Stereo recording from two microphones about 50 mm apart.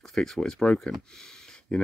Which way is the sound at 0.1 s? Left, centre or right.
Centre.